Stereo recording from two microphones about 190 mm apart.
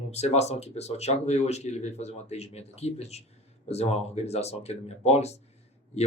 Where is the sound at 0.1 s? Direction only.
35° left (ahead or behind).